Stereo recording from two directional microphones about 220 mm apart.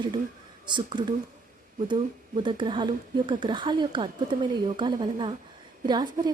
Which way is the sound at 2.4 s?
20° right (ahead or behind).